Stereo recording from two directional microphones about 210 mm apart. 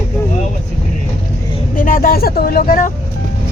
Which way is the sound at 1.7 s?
40° left (ahead or behind).